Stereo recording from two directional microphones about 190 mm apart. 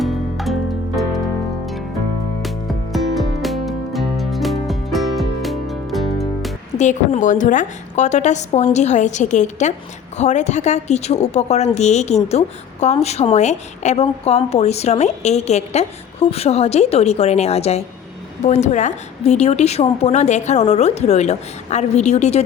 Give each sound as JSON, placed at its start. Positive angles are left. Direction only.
{"t": 0.0, "sound": "music", "side_deg": 0}
{"t": 2.4, "sound": "music", "side_deg": 0}
{"t": 6.7, "sound": "a woman's voice", "side_deg": 40}